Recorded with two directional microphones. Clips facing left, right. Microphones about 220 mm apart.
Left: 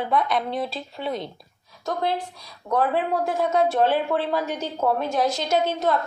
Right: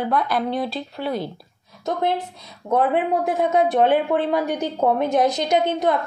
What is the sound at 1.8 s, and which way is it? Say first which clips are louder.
A woman's voice: right 3 dB; 20° right (ahead or behind).